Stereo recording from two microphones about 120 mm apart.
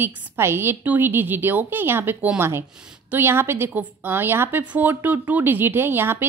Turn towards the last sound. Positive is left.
turn(degrees=-20)  # may be behind; listen again after turning